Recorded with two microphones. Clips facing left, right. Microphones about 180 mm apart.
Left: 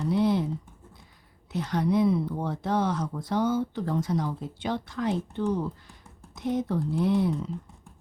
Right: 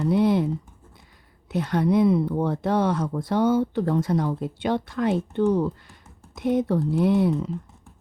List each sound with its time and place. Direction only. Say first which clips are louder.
0.1 s computer keyboard: right 4 dB; 55° right (ahead or behind)
1.5 s speech: right 4 dB; 60° right (ahead or behind)